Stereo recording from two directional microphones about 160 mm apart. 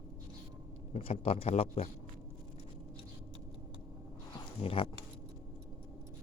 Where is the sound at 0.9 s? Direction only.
35° left (ahead or behind).